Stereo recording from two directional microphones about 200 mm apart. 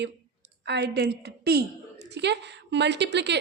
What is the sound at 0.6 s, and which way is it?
A woman's voice, 60° right (ahead or behind).